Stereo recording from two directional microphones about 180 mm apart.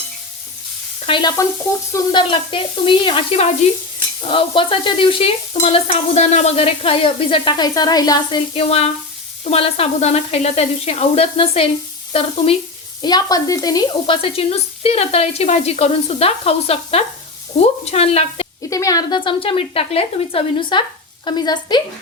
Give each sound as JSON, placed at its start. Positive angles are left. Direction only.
{"t": 1.0, "sound": "stir", "side_deg": 25}
{"t": 8.5, "sound": "speech", "side_deg": 35}
{"t": 13.0, "sound": "speech", "side_deg": 25}
{"t": 18.7, "sound": "stir", "side_deg": 20}